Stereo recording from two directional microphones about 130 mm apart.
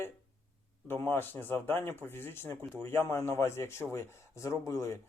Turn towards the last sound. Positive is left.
turn(degrees=25)  # may be behind; listen again after turning